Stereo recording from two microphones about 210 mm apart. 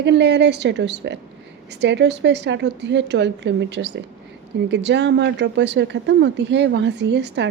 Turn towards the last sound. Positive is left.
turn(degrees=-55)  # may be behind; listen again after turning